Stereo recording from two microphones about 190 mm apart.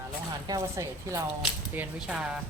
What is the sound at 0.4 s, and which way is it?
Speech, 15° right (ahead or behind).